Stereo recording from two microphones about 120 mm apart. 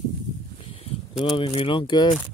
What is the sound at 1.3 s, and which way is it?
Speech, 50° left (ahead or behind).